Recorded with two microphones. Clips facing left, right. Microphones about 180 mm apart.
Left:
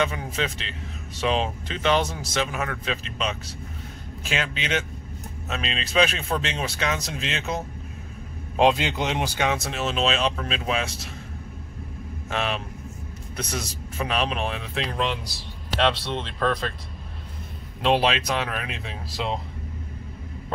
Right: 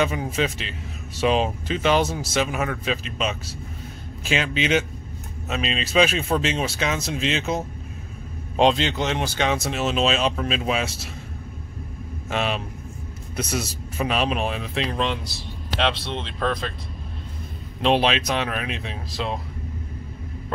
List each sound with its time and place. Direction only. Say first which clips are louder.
0.0 s speech: right 3 dB; 5° right (ahead or behind)
8.5 s speech: right 1 dB; 10° left (ahead or behind)
9.5 s speech: right 3 dB; centre (ahead or behind)
12.3 s speech: right 2 dB; 5° right (ahead or behind)
16.3 s speech: even; centre (ahead or behind)
17.8 s speech: right 1 dB; centre (ahead or behind)
19.1 s speech: even; 15° left (ahead or behind)